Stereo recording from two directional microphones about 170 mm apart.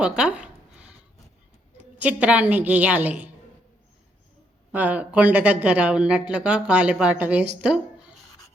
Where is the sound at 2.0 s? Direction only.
10° right (ahead or behind).